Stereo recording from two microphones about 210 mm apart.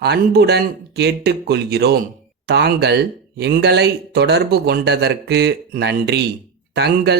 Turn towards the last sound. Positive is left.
turn(degrees=-50)  # may be behind; listen again after turning